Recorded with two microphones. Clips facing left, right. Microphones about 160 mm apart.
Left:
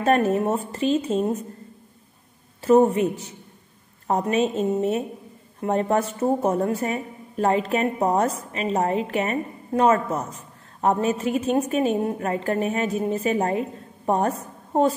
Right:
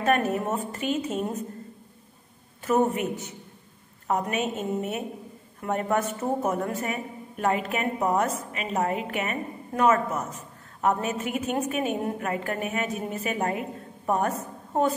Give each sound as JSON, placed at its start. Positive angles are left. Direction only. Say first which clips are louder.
{"t": 0.0, "sound": "a woman's voice", "louder": "left 4 dB", "side_deg": 30}
{"t": 2.6, "sound": "a woman's voice", "louder": "left 7 dB", "side_deg": 30}